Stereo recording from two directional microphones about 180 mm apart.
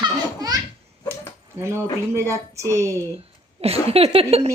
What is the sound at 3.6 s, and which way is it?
Speech, 35° right (ahead or behind).